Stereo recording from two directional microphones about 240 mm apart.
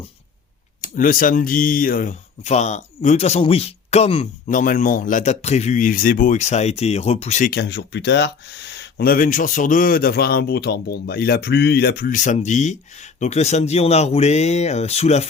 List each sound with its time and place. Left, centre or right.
0.8 s speech: left